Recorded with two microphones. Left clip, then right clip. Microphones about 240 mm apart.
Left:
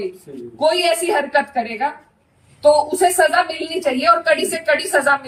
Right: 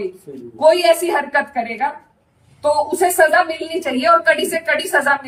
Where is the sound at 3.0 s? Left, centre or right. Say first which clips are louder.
Right 1 dB; centre.